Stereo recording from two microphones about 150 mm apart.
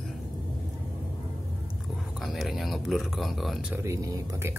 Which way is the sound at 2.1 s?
Centre (ahead or behind).